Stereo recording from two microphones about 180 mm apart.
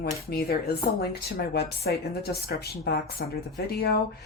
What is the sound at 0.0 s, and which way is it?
Speech, 60° left (ahead or behind).